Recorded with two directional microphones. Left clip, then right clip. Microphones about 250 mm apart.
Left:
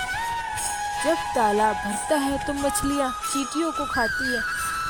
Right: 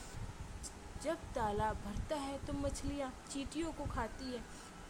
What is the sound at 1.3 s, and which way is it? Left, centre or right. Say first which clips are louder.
Speech: left 16 dB; left.